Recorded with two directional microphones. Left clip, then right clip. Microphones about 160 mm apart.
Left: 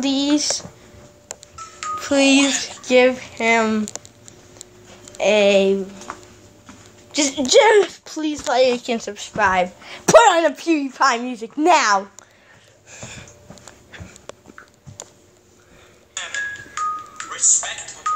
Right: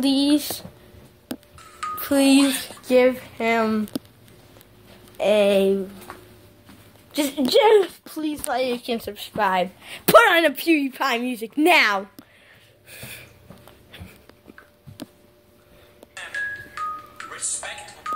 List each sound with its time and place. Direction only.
0.0 s a woman's voice: 20° right (ahead or behind)
2.0 s speech: 10° right (ahead or behind)
5.1 s a woman's voice: 15° right (ahead or behind)
7.1 s a woman's voice: 10° right (ahead or behind)
9.0 s a woman's voice: 10° right (ahead or behind)
12.9 s snort: 25° right (ahead or behind)
13.9 s dog: 15° right (ahead or behind)
16.2 s music: 15° left (ahead or behind)